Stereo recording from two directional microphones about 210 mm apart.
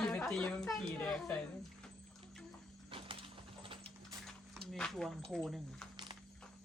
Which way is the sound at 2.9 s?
25° right (ahead or behind).